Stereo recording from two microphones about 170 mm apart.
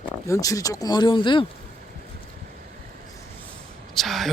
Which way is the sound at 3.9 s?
Centre (ahead or behind).